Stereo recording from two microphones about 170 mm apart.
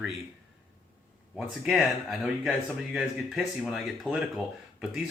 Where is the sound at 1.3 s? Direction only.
5° right (ahead or behind).